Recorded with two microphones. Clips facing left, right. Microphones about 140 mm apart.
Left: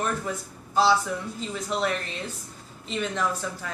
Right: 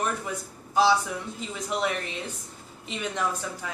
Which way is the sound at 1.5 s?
10° right (ahead or behind).